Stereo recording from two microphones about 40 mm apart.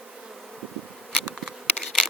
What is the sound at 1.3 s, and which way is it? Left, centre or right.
Insect, centre.